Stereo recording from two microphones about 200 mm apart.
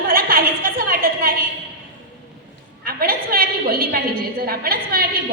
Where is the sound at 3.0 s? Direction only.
45° right (ahead or behind).